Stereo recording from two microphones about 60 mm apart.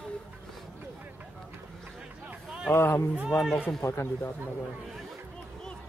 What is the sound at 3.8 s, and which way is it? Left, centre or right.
Speech, left.